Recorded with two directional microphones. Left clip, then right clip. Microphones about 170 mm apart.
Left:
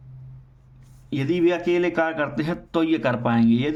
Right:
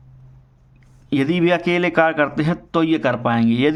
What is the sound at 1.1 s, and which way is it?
Speech, 35° right (ahead or behind).